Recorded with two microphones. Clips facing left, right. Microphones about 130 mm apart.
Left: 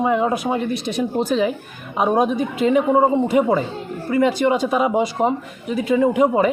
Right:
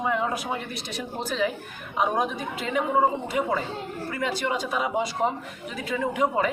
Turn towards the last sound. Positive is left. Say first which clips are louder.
# left 9 dB
turn(degrees=15)  # may be behind; listen again after turning